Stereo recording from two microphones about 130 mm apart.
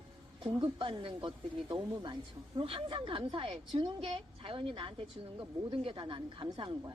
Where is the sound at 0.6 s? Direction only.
45° right (ahead or behind).